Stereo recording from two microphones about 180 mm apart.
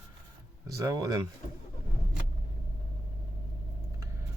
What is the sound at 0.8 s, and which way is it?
Speech, 20° right (ahead or behind).